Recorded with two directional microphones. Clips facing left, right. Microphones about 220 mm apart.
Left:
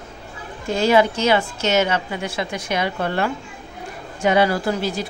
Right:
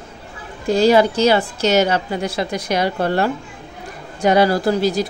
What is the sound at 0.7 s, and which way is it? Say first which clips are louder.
Speech: right 4 dB; 35° right (ahead or behind).